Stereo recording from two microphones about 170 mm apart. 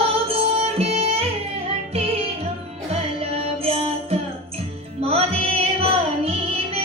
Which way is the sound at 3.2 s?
35° right (ahead or behind).